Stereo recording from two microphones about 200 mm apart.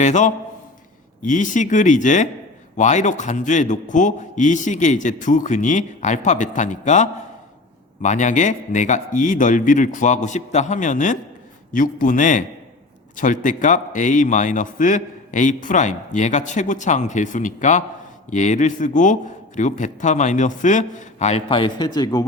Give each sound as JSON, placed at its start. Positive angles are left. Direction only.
{"t": 0.0, "sound": "a man's voice", "side_deg": 35}